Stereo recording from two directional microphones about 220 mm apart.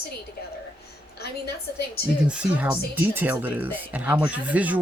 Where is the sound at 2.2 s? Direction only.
5° right (ahead or behind).